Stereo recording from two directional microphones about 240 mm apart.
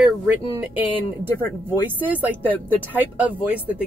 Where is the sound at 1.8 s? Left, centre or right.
Centre.